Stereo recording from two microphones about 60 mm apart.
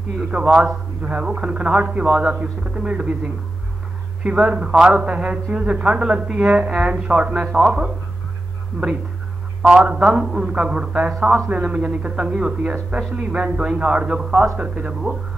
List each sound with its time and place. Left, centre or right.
0.3 s a man's voice: centre
4.2 s a man's voice: centre
9.7 s a man's voice: centre
11.1 s a man's voice: centre
11.4 s a man's voice: right